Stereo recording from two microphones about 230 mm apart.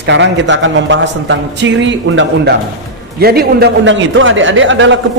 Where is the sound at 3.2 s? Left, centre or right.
Right.